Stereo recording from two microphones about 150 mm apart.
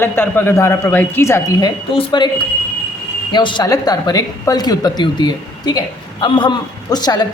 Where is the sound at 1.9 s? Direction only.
30° left (ahead or behind).